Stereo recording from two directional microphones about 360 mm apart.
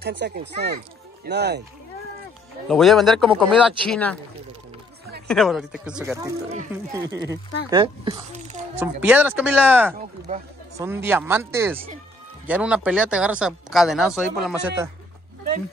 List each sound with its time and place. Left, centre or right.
0.2 s speech: right
2.7 s speech: centre
5.3 s speech: centre
10.3 s speech: centre
10.8 s speech: centre